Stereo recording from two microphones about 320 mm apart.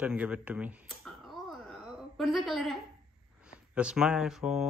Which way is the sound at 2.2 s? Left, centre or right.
Centre.